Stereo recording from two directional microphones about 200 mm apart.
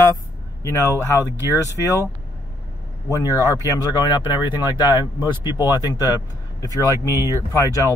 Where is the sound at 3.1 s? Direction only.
15° left (ahead or behind).